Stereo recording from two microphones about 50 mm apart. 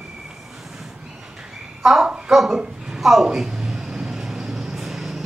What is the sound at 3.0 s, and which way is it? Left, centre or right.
Vehicle, centre.